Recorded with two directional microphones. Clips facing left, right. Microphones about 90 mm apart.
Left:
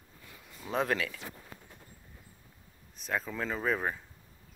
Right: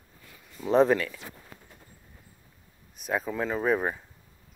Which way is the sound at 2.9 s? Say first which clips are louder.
Right 5 dB; 10° right (ahead or behind).